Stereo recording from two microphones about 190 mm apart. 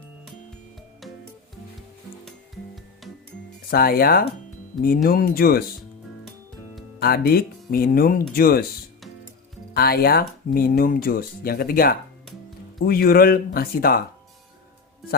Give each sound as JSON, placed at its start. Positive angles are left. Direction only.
{"t": 1.0, "sound": "music", "side_deg": 0}
{"t": 3.7, "sound": "speech", "side_deg": 50}
{"t": 7.0, "sound": "speech", "side_deg": 55}
{"t": 9.7, "sound": "speech", "side_deg": 55}